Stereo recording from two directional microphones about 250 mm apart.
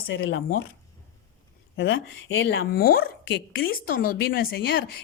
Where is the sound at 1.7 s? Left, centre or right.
Left.